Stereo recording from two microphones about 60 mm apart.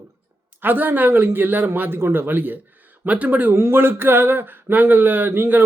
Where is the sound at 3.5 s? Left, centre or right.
Right.